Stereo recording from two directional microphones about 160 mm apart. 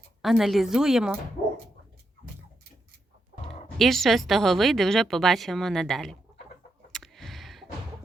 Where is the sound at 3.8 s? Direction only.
Centre (ahead or behind).